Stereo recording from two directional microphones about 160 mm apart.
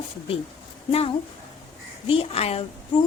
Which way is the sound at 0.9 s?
35° left (ahead or behind).